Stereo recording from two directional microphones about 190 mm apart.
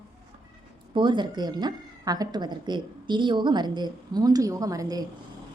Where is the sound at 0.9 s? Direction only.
25° right (ahead or behind).